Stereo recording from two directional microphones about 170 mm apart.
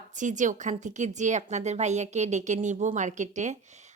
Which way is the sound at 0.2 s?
45° right (ahead or behind).